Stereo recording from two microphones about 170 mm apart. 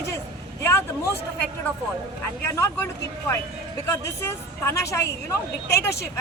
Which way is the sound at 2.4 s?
20° left (ahead or behind).